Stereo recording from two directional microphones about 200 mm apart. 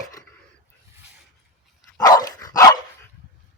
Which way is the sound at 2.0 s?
20° left (ahead or behind).